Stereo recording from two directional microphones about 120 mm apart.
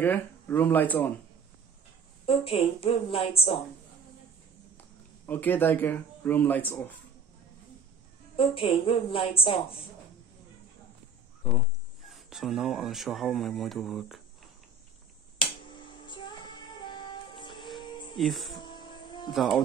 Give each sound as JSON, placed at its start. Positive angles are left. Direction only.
{"t": 0.0, "sound": "speech", "side_deg": 15}
{"t": 2.2, "sound": "a woman's voice", "side_deg": 50}
{"t": 4.7, "sound": "speech", "side_deg": 15}
{"t": 8.4, "sound": "a woman's voice", "side_deg": 50}
{"t": 12.1, "sound": "speech", "side_deg": 0}
{"t": 15.7, "sound": "music", "side_deg": 40}
{"t": 18.1, "sound": "speech", "side_deg": 0}
{"t": 18.6, "sound": "music", "side_deg": 40}
{"t": 19.3, "sound": "speech", "side_deg": 0}